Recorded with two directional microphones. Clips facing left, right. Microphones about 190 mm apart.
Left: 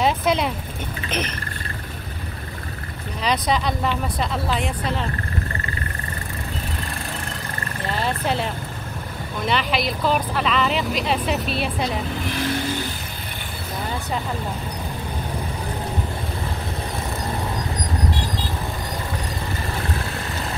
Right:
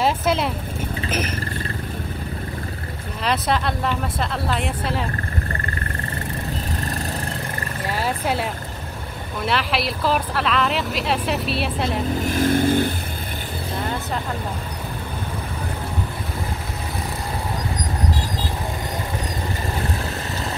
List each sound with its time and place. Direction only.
0.0 s speech: 5° right (ahead or behind)
3.3 s speech: centre (ahead or behind)
7.8 s speech: 10° right (ahead or behind)
12.2 s speech: 45° right (ahead or behind)